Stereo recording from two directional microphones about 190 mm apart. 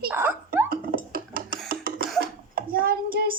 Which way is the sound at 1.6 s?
50° right (ahead or behind).